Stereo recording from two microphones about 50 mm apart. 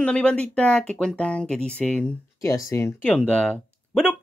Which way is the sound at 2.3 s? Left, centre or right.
Left.